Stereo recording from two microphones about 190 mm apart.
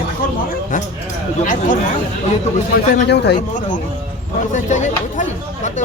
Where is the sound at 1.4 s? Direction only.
45° left (ahead or behind).